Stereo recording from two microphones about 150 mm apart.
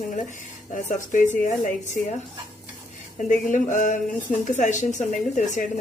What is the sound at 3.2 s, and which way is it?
Speech, 60° left (ahead or behind).